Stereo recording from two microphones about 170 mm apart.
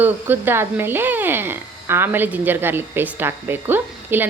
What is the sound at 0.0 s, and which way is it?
Speech, 10° right (ahead or behind).